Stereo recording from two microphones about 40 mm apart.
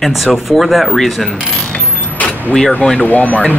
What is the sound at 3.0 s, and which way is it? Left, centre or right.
Speech, left.